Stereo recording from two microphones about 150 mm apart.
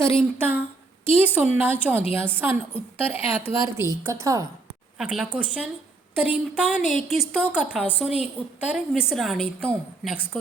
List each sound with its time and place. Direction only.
0.3 s a woman's voice: 15° right (ahead or behind)
4.9 s a woman's voice: 5° right (ahead or behind)